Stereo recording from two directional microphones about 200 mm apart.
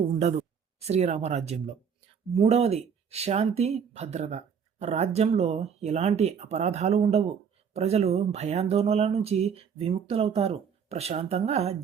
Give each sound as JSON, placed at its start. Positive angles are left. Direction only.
{"t": 0.9, "sound": "speech", "side_deg": -35}